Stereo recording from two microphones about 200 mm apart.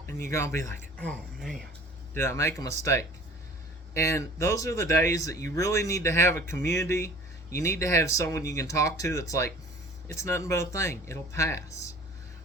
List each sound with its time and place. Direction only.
0.3 s speech: 15° left (ahead or behind)
2.1 s speech: 15° left (ahead or behind)